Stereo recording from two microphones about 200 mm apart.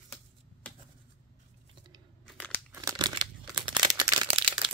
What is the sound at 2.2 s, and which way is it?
Crunch, 5° left (ahead or behind).